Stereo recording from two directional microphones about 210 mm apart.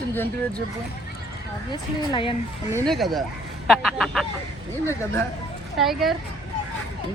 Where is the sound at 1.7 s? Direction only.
25° left (ahead or behind).